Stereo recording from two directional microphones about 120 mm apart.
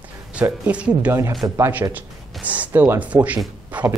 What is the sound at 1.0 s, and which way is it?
Speech, 20° right (ahead or behind).